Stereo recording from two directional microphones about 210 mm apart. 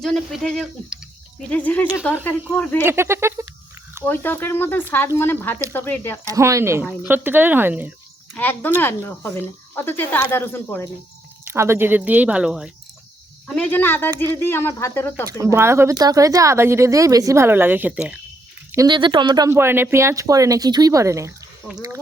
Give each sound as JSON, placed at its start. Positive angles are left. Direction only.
{"t": 0.0, "sound": "speech", "side_deg": 0}
{"t": 2.8, "sound": "speech", "side_deg": -10}
{"t": 4.0, "sound": "speech", "side_deg": 10}
{"t": 6.2, "sound": "speech", "side_deg": -15}
{"t": 8.4, "sound": "speech", "side_deg": 10}
{"t": 11.4, "sound": "speech", "side_deg": -10}
{"t": 13.5, "sound": "speech", "side_deg": 5}
{"t": 15.3, "sound": "speech", "side_deg": -15}
{"t": 18.7, "sound": "speech", "side_deg": -20}